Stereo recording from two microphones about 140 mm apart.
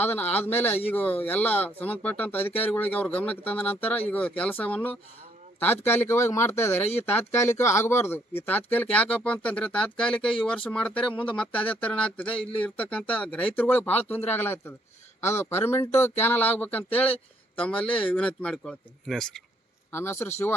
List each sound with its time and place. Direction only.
0.0 s speech: 10° left (ahead or behind)
19.9 s speech: 15° left (ahead or behind)